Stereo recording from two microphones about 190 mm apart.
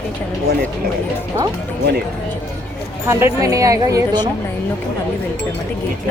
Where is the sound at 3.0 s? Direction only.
15° right (ahead or behind).